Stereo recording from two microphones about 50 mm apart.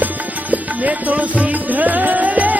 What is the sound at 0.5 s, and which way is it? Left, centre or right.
Music, right.